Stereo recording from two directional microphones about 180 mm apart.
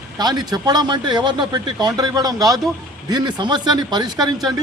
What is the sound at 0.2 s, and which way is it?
Speech, 25° right (ahead or behind).